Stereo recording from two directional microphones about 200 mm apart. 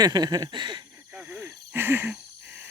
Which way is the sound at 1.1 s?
5° right (ahead or behind).